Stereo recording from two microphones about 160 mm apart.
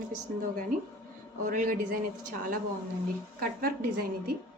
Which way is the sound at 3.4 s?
65° right (ahead or behind).